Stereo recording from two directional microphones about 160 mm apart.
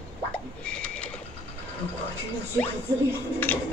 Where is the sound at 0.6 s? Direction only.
5° left (ahead or behind).